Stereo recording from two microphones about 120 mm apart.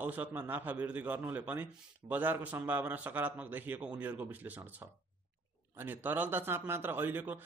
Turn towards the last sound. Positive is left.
turn(degrees=-15)  # may be behind; listen again after turning